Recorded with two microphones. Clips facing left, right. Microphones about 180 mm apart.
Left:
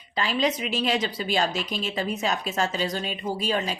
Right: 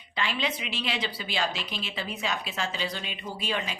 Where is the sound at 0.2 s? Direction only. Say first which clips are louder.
Left 6 dB; 40° left (ahead or behind).